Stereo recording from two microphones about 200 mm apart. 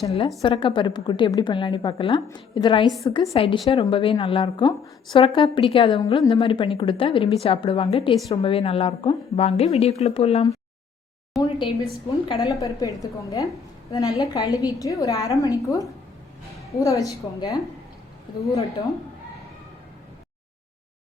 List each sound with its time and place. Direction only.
0.0 s a woman's voice: 30° left (ahead or behind)
11.3 s a woman's voice: centre (ahead or behind)
12.4 s a woman's voice: 15° left (ahead or behind)